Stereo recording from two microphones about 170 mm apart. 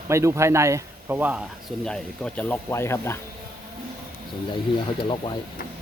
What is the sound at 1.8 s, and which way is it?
Speech, 5° left (ahead or behind).